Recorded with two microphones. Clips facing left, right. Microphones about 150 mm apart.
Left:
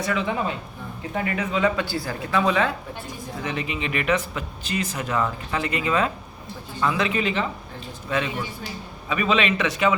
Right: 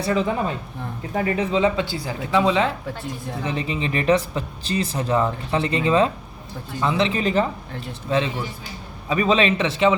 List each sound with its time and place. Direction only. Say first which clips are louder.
0.0 s speech: right 3 dB; 35° right (ahead or behind)